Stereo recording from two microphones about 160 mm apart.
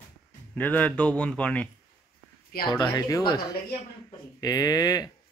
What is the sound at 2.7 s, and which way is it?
Speech, 15° left (ahead or behind).